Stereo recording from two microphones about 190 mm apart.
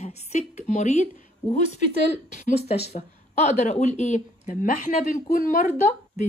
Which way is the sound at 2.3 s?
35° left (ahead or behind).